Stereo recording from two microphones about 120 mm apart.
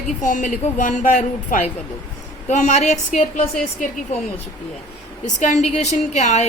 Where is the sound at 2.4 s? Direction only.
70° left (ahead or behind).